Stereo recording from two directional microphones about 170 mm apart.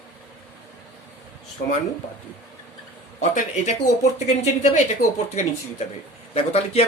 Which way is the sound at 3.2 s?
45° left (ahead or behind).